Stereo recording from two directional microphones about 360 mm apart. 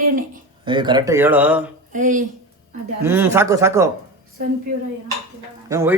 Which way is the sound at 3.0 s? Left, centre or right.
Centre.